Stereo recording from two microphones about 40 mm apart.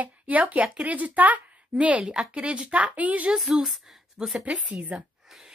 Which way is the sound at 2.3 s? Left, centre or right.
Right.